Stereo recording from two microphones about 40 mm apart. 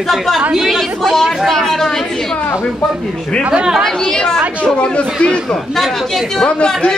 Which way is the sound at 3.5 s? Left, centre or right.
Centre.